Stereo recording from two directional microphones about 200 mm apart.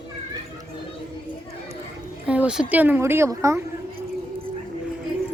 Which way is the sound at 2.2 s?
5° right (ahead or behind).